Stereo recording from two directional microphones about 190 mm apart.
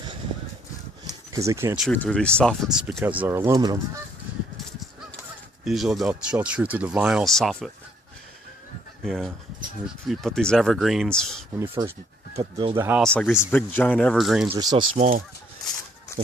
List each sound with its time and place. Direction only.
1.3 s speech: 15° right (ahead or behind)
1.9 s speech: 5° left (ahead or behind)
3.0 s speech: 10° right (ahead or behind)
4.5 s honk: centre (ahead or behind)
5.6 s speech: centre (ahead or behind)
9.0 s speech: centre (ahead or behind)
12.4 s speech: 30° right (ahead or behind)
12.7 s speech: 10° right (ahead or behind)
13.0 s speech: 5° left (ahead or behind)
14.5 s speech: 20° right (ahead or behind)
14.9 s speech: 35° right (ahead or behind)